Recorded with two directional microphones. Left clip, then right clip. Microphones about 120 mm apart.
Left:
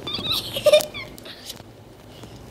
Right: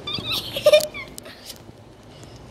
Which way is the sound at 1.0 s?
40° right (ahead or behind).